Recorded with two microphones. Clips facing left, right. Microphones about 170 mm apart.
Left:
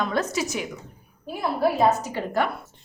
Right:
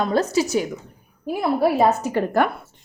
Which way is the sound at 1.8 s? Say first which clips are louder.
Right 3 dB; 55° right (ahead or behind).